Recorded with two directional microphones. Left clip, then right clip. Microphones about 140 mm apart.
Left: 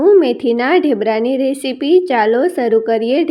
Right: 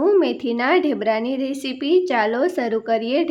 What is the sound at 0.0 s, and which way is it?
A woman's voice, 20° left (ahead or behind).